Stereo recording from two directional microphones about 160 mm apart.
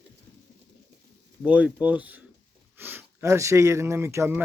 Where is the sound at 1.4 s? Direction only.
5° right (ahead or behind).